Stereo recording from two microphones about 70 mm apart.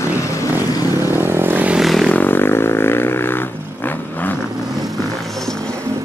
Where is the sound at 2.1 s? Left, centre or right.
Left.